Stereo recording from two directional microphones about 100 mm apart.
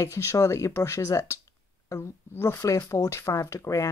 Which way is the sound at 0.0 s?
30° left (ahead or behind).